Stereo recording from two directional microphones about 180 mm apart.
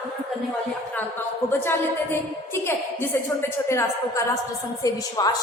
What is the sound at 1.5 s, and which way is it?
A woman's voice, 10° left (ahead or behind).